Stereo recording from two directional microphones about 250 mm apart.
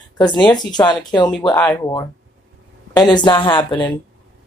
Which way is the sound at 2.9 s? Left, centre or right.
Centre.